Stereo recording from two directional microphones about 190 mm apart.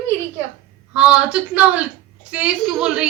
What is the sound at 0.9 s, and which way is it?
A woman's voice, 5° right (ahead or behind).